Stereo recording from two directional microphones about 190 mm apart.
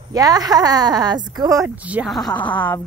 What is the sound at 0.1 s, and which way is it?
A woman's voice, 20° right (ahead or behind).